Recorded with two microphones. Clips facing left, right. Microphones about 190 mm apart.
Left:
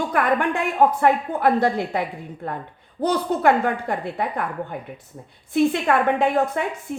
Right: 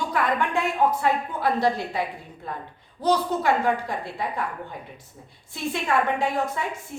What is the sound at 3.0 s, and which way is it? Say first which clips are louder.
A woman's voice: left 3 dB; 55° left (ahead or behind).